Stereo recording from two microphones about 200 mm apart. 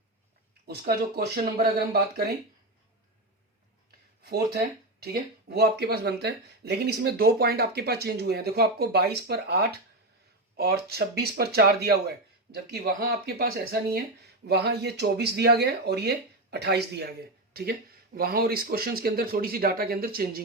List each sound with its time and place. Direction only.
0.7 s speech: 50° right (ahead or behind)
4.2 s speech: 50° right (ahead or behind)